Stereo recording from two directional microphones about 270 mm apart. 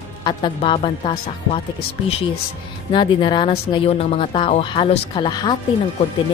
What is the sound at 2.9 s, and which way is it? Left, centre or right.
Speech, centre.